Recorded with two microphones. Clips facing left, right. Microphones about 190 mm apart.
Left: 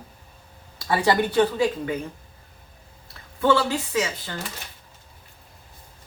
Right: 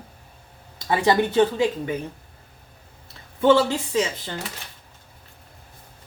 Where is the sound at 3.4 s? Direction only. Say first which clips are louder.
Right 3 dB; 25° right (ahead or behind).